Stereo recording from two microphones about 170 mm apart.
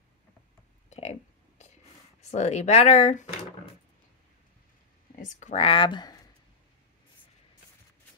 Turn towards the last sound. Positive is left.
turn(degrees=25)  # may be behind; listen again after turning